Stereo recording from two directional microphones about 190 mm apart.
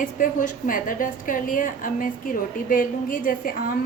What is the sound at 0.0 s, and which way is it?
A woman's voice, 40° left (ahead or behind).